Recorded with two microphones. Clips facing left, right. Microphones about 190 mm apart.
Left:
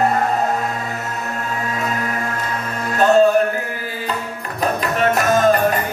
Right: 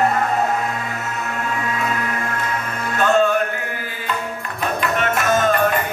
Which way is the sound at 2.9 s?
35° left (ahead or behind).